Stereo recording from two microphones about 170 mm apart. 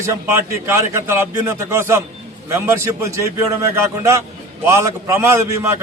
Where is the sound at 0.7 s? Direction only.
15° right (ahead or behind).